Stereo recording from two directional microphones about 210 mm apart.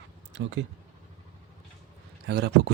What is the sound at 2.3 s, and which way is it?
Speech, 55° right (ahead or behind).